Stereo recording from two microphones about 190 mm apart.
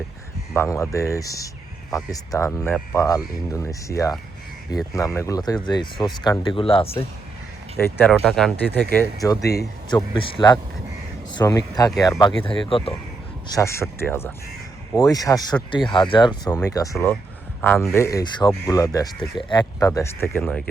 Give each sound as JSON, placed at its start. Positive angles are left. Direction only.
{"t": 0.5, "sound": "speech", "side_deg": 15}
{"t": 2.5, "sound": "speech", "side_deg": 5}
{"t": 7.8, "sound": "speech", "side_deg": 10}
{"t": 13.6, "sound": "speech", "side_deg": 15}
{"t": 20.3, "sound": "speech", "side_deg": 0}